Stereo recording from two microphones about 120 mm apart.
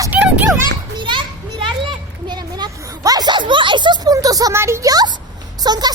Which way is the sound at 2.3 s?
35° right (ahead or behind).